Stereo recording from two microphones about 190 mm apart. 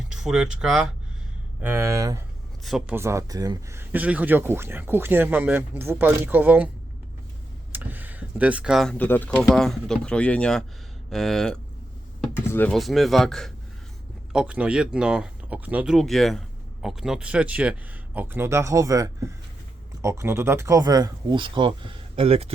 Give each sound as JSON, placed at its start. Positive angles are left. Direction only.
{"t": 0.2, "sound": "speech", "side_deg": -5}
{"t": 2.6, "sound": "speech", "side_deg": 0}
{"t": 2.9, "sound": "speech", "side_deg": -15}
{"t": 7.7, "sound": "speech", "side_deg": -10}